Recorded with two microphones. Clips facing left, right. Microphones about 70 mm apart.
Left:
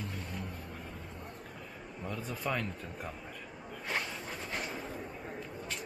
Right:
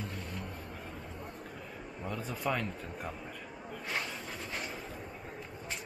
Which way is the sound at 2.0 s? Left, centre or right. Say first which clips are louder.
Right 2 dB; centre.